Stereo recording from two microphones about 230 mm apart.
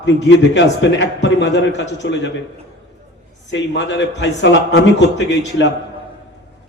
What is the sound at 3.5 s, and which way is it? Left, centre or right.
A man's voice, left.